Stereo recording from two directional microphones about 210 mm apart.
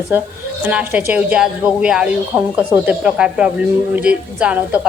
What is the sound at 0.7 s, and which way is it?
A woman's voice, 5° right (ahead or behind).